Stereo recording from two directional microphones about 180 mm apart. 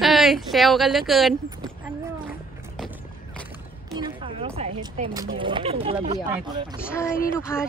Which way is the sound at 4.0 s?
30° right (ahead or behind).